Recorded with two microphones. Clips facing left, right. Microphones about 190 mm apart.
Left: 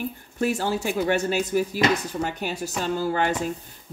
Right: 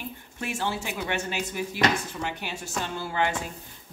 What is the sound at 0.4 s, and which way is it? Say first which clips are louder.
Speech: left 7 dB; 40° left (ahead or behind).